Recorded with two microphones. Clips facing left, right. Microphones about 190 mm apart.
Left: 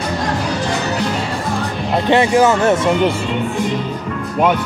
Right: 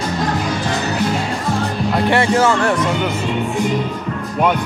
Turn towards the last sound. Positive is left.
turn(degrees=20)  # may be behind; listen again after turning